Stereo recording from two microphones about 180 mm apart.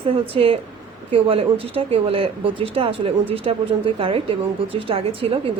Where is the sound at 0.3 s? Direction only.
30° right (ahead or behind).